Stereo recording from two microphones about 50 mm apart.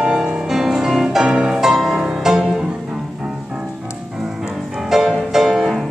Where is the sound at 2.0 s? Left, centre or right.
Centre.